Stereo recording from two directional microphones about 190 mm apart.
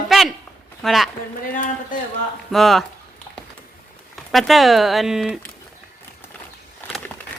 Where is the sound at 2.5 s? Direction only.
Centre (ahead or behind).